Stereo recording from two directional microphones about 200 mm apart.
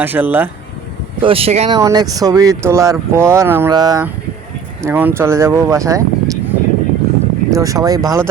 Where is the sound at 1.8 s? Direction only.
15° right (ahead or behind).